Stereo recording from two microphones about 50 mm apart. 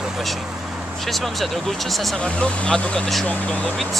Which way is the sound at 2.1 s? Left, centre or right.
Left.